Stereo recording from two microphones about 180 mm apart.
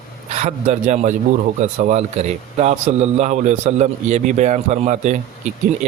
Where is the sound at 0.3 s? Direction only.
40° right (ahead or behind).